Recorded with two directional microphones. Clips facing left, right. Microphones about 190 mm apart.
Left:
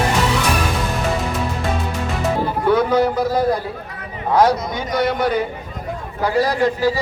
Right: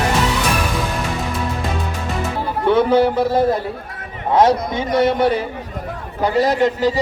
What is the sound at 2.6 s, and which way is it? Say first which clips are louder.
A man's voice: right 2 dB; 30° right (ahead or behind).